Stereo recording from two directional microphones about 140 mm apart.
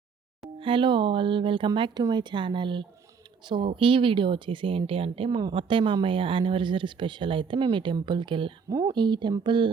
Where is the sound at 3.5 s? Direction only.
40° right (ahead or behind).